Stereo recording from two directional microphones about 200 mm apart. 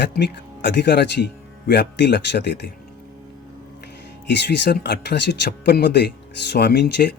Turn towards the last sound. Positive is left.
turn(degrees=55)  # may be behind; listen again after turning